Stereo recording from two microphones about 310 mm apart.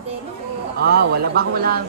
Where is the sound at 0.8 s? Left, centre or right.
Right.